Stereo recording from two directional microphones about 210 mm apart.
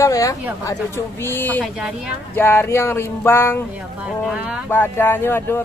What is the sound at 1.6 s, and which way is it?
Speech, centre (ahead or behind).